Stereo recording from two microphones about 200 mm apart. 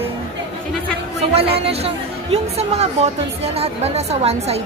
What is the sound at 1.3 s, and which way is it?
A woman's voice, 30° right (ahead or behind).